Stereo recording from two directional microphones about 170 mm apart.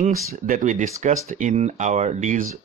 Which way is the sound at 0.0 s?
50° right (ahead or behind).